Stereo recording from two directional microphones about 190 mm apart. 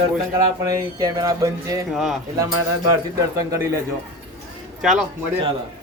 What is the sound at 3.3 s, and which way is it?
Speech, 15° right (ahead or behind).